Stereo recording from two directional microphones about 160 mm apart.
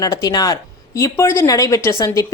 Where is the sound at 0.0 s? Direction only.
25° left (ahead or behind).